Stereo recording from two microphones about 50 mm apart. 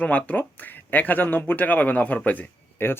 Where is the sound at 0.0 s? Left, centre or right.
Left.